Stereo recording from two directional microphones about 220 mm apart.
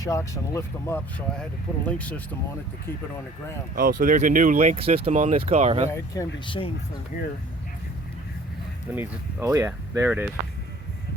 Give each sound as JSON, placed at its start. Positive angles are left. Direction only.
{"t": 0.0, "sound": "speech", "side_deg": 15}
{"t": 3.8, "sound": "speech", "side_deg": -40}
{"t": 5.9, "sound": "speech", "side_deg": 20}
{"t": 9.0, "sound": "speech", "side_deg": -10}